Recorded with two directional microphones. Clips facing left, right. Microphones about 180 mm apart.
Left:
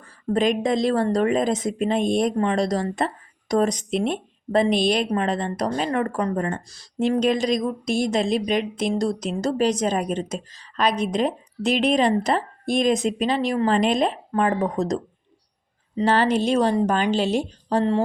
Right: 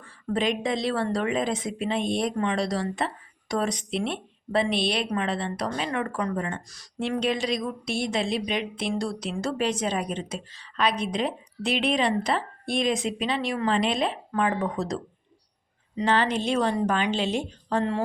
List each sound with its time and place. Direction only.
0.0 s a woman's voice: 45° left (ahead or behind)